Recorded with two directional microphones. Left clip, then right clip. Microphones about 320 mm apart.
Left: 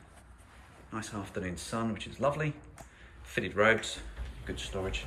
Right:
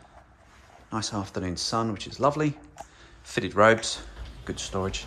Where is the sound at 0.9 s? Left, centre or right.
Centre.